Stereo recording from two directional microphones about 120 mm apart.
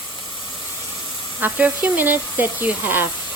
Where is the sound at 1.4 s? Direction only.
15° right (ahead or behind).